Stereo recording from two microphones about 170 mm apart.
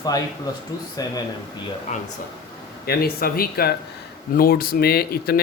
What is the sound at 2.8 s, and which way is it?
Speech, 65° left (ahead or behind).